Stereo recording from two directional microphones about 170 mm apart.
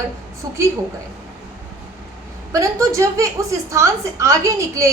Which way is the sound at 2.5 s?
20° right (ahead or behind).